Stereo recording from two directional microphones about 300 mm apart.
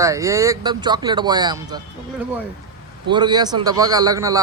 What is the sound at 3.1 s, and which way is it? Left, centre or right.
Speech, centre.